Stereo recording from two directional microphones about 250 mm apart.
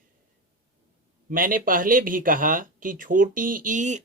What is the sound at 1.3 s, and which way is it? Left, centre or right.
Speech, right.